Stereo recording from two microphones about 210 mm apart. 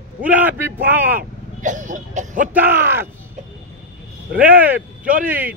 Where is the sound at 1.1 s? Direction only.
35° right (ahead or behind).